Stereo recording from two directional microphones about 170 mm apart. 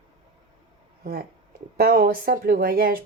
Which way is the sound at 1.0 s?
60° right (ahead or behind).